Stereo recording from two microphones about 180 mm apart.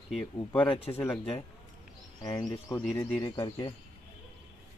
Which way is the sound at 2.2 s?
20° left (ahead or behind).